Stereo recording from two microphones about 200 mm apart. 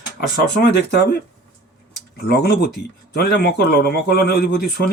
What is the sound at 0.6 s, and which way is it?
Speech, 55° left (ahead or behind).